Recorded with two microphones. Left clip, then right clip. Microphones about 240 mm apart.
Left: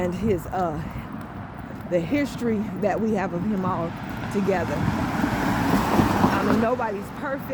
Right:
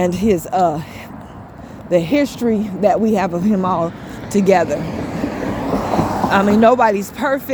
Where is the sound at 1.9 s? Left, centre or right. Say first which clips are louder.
Right 9 dB; right.